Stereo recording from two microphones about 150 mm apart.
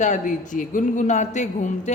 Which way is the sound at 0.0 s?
55° left (ahead or behind).